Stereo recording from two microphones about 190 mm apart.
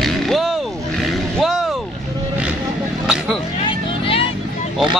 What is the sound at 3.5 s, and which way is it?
Vehicle, 30° left (ahead or behind).